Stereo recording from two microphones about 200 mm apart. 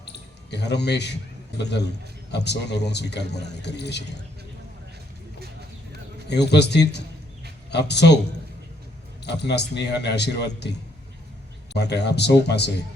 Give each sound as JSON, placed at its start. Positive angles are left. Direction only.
{"t": 0.0, "sound": "a sound", "side_deg": 55}
{"t": 1.6, "sound": "a man's voice", "side_deg": 55}
{"t": 6.2, "sound": "a man's voice", "side_deg": 60}
{"t": 9.2, "sound": "a man's voice", "side_deg": 60}